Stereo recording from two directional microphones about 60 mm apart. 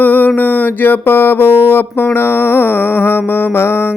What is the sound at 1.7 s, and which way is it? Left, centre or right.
Music, left.